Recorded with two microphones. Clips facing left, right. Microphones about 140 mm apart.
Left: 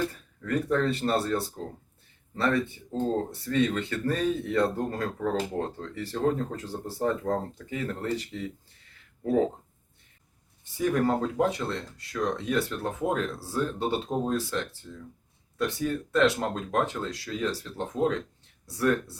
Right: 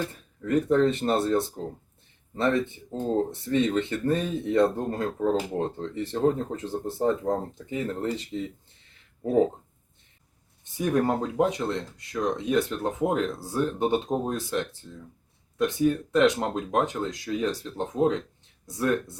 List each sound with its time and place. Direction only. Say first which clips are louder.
0.4 s speech: right 4 dB; 20° right (ahead or behind)
10.6 s speech: right 1 dB; 20° right (ahead or behind)